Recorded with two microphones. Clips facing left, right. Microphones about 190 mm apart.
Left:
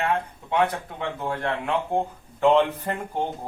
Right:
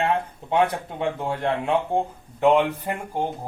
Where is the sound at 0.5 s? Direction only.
25° right (ahead or behind).